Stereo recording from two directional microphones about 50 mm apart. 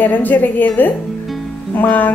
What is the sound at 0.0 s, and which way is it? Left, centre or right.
A woman's voice, left.